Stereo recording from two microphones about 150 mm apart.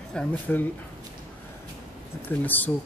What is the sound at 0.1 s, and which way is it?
Speech, 10° left (ahead or behind).